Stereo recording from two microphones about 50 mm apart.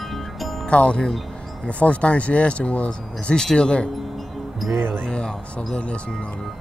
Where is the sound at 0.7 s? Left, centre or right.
Left.